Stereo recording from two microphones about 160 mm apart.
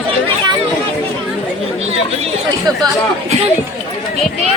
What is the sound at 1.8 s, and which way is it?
Chatter, 40° right (ahead or behind).